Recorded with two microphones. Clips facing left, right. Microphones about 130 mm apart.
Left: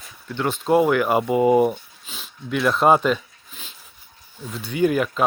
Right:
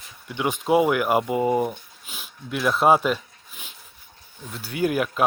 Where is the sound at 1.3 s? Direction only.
15° left (ahead or behind).